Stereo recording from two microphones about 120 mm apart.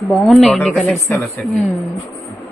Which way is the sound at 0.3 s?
Centre (ahead or behind).